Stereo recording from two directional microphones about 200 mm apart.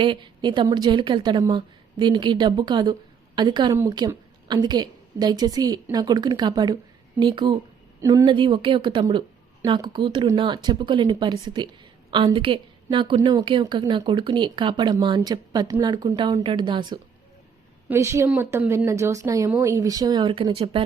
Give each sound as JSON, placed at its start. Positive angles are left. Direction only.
{"t": 0.0, "sound": "a woman's voice", "side_deg": -25}